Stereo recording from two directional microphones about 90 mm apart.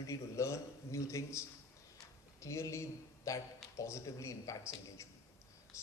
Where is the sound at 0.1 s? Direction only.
35° left (ahead or behind).